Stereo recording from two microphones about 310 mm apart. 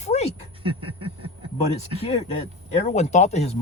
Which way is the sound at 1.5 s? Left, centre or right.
Centre.